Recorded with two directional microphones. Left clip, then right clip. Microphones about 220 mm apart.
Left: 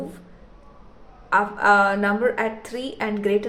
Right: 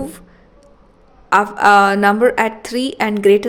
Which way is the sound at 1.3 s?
50° right (ahead or behind).